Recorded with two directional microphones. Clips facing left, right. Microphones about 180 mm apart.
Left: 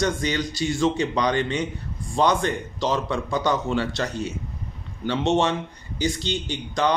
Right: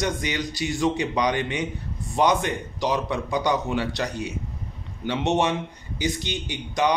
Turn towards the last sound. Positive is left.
turn(degrees=-15)  # may be behind; listen again after turning